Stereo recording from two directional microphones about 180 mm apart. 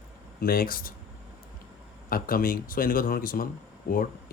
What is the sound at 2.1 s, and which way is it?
Speech, 55° left (ahead or behind).